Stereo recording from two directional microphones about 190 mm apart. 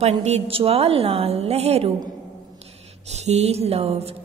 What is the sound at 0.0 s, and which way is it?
A woman's voice, 35° right (ahead or behind).